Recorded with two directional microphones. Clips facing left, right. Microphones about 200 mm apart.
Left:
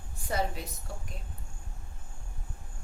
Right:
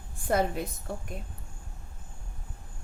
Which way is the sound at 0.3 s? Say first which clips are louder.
Right 6 dB; 55° right (ahead or behind).